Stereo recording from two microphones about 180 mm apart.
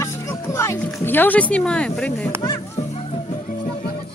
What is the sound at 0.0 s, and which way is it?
Speech, 15° left (ahead or behind).